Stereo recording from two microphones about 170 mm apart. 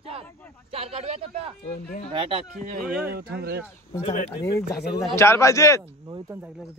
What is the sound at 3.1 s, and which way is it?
Speech, 65° right (ahead or behind).